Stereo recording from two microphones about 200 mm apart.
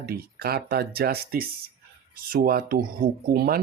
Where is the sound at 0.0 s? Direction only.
50° right (ahead or behind).